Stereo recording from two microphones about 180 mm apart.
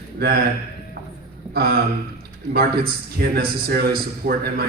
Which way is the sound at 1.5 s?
60° right (ahead or behind).